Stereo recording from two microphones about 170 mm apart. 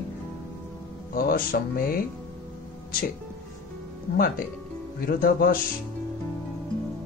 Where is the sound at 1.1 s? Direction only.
55° left (ahead or behind).